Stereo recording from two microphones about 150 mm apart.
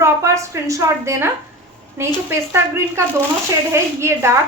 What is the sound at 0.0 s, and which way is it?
A woman's voice, 20° right (ahead or behind).